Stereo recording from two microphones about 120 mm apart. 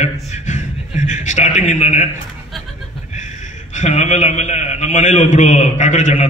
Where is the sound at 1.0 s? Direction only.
85° left.